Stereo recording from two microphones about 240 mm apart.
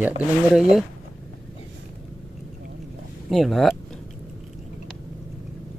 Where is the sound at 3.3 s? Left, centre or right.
Centre.